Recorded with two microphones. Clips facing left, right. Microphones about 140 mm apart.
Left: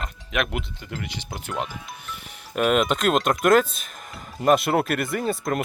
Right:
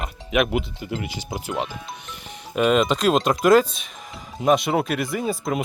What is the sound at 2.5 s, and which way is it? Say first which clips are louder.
Speech: right 2 dB; 5° left (ahead or behind).